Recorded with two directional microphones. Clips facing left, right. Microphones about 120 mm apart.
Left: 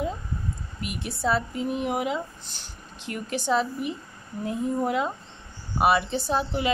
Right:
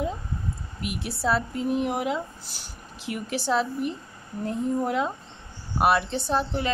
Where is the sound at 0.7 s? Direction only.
Centre (ahead or behind).